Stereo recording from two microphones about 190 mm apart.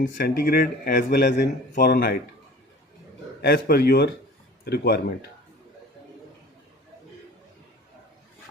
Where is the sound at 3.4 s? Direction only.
55° left (ahead or behind).